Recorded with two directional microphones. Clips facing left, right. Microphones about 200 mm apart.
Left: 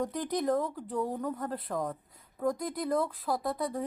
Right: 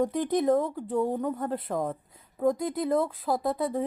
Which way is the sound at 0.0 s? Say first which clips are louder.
Right 6 dB; 25° right (ahead or behind).